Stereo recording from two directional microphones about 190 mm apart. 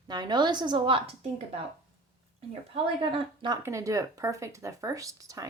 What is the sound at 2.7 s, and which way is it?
Speech, 25° right (ahead or behind).